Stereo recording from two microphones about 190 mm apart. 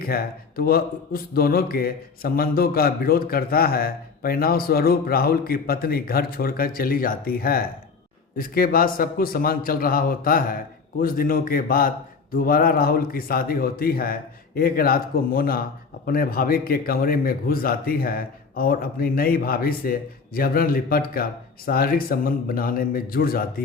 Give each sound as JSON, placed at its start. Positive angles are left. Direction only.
{"t": 0.0, "sound": "speech", "side_deg": 50}